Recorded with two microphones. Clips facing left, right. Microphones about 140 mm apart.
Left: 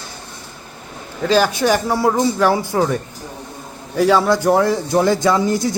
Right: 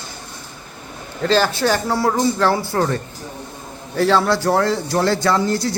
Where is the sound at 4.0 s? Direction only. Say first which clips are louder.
Left 2 dB; 10° left (ahead or behind).